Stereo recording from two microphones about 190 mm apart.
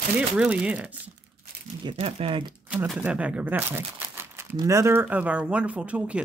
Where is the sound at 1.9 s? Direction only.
30° right (ahead or behind).